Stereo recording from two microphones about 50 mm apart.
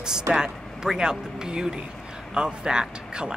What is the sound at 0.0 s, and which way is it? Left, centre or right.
Speech, centre.